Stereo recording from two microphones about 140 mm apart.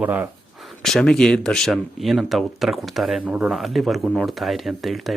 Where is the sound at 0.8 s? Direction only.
5° left (ahead or behind).